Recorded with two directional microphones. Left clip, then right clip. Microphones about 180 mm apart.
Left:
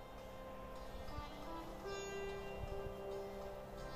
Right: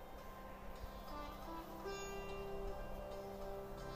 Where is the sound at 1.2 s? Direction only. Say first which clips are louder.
Even; centre (ahead or behind).